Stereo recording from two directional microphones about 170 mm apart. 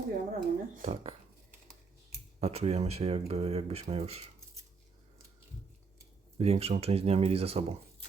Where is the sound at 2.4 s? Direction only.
35° right (ahead or behind).